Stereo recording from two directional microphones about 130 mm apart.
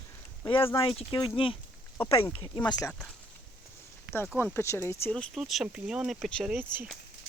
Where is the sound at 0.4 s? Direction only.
40° left (ahead or behind).